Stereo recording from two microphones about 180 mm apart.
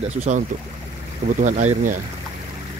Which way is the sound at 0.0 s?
40° right (ahead or behind).